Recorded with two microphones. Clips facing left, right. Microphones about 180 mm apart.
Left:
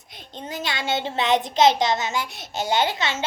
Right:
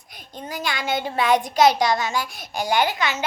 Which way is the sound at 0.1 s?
25° left (ahead or behind).